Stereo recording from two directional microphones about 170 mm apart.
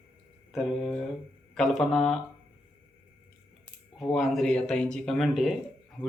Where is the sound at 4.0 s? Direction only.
Centre (ahead or behind).